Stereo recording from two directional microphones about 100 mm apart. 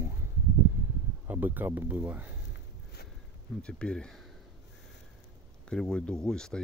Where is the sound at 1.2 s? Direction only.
20° right (ahead or behind).